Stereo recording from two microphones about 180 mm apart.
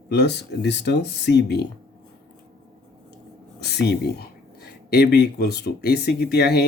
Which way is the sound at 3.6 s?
70° left (ahead or behind).